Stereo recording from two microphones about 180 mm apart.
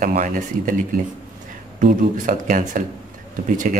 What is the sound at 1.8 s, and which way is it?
A man's voice, 45° right (ahead or behind).